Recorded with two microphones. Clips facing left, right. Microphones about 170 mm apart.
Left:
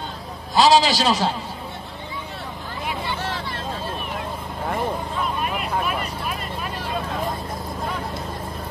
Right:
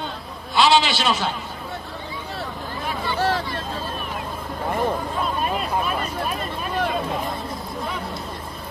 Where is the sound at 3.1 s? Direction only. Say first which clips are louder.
Right 7 dB; 35° right (ahead or behind).